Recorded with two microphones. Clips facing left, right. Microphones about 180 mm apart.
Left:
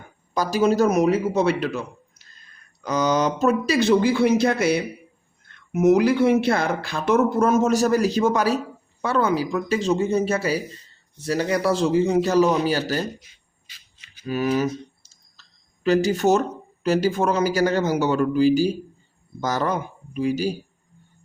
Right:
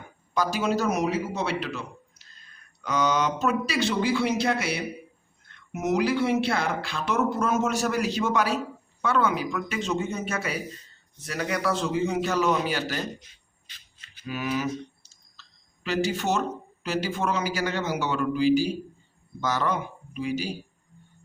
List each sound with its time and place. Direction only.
0.3 s speech: 40° left (ahead or behind)
13.7 s a sound: 10° left (ahead or behind)
14.3 s speech: 40° left (ahead or behind)